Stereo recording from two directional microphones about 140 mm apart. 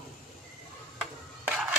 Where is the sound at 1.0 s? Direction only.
5° right (ahead or behind).